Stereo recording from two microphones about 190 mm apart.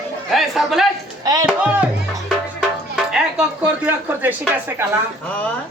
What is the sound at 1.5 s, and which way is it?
Speech, 5° right (ahead or behind).